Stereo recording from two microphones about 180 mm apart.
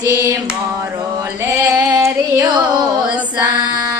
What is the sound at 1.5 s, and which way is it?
Female singing, 20° right (ahead or behind).